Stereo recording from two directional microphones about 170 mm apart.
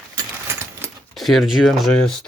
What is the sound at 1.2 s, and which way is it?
Speech, centre (ahead or behind).